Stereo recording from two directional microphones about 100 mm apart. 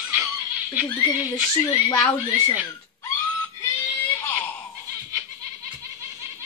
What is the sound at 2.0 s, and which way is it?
Speech, 30° left (ahead or behind).